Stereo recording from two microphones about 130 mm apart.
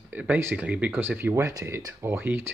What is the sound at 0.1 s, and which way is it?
Speech, 15° right (ahead or behind).